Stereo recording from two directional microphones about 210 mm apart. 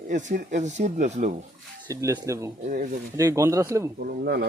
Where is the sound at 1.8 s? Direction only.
15° right (ahead or behind).